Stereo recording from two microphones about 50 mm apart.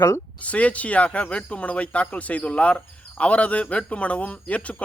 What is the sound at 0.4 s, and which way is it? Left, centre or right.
Speech, left.